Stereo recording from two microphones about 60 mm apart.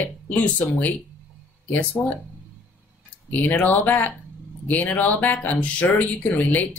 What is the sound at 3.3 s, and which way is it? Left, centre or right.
Speech, left.